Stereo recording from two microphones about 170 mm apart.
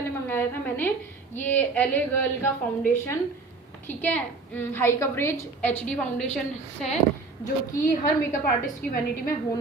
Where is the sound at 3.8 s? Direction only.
10° left (ahead or behind).